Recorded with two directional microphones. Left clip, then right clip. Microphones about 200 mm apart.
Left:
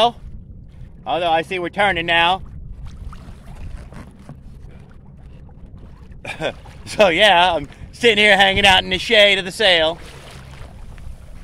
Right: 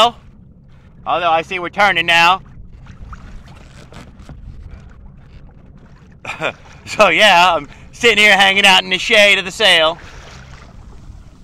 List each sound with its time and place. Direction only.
1.0 s a man's voice: 10° left (ahead or behind)
6.2 s boat: 10° left (ahead or behind)
6.9 s a man's voice: 5° left (ahead or behind)
9.9 s boat: 55° left (ahead or behind)